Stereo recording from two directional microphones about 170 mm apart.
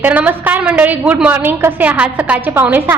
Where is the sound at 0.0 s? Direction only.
10° right (ahead or behind).